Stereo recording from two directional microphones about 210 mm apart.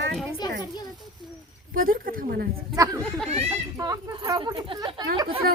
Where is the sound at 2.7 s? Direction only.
15° right (ahead or behind).